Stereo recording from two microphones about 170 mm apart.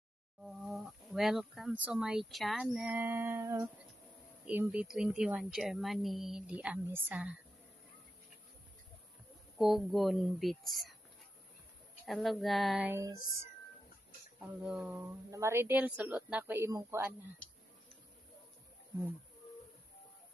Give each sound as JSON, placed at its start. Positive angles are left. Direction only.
{"t": 0.4, "sound": "speech", "side_deg": 0}
{"t": 9.6, "sound": "speech", "side_deg": 0}
{"t": 12.1, "sound": "speech", "side_deg": 0}
{"t": 12.9, "sound": "speech", "side_deg": -20}
{"t": 14.4, "sound": "speech", "side_deg": -5}